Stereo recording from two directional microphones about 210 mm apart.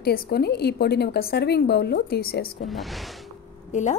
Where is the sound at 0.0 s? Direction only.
45° left (ahead or behind).